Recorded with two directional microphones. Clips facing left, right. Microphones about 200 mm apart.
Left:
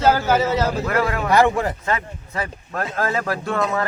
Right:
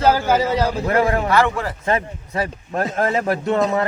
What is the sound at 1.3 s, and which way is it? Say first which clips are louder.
Speech: left 2 dB; 20° left (ahead or behind).